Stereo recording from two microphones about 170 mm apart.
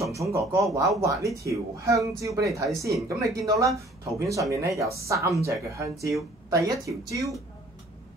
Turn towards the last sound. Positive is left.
turn(degrees=-20)  # may be behind; listen again after turning